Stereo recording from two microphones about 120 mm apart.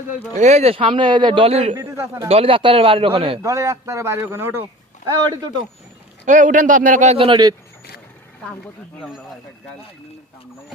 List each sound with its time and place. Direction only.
0.3 s a man's voice: 70° right (ahead or behind)
1.7 s speech: 25° right (ahead or behind)
2.2 s a man's voice: 55° right (ahead or behind)
3.4 s speech: 25° right (ahead or behind)
5.0 s a man's voice: 35° right (ahead or behind)
6.2 s speech: 90° right
7.2 s a man's voice: 40° right (ahead or behind)
9.0 s speech: centre (ahead or behind)